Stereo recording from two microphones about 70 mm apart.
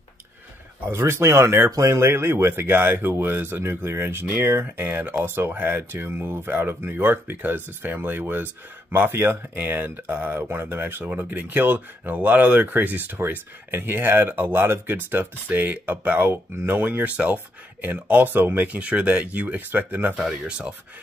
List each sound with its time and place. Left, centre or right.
0.8 s speech: right
20.2 s speech: centre